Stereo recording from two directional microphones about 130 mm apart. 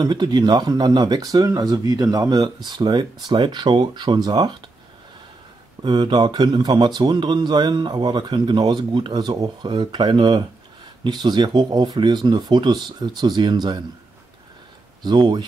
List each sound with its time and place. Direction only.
0.0 s speech: 35° right (ahead or behind)
5.8 s speech: 35° right (ahead or behind)
15.0 s speech: 35° right (ahead or behind)